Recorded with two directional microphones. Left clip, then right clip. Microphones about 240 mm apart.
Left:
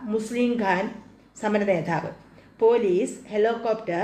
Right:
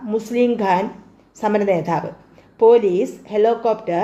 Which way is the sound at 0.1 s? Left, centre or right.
Right.